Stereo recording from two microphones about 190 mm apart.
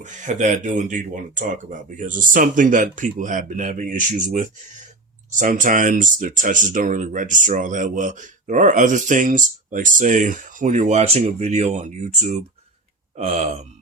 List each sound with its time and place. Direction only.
0.0 s speech: 40° right (ahead or behind)